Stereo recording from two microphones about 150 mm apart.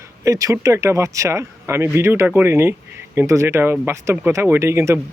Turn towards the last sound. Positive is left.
turn(degrees=-20)  # may be behind; listen again after turning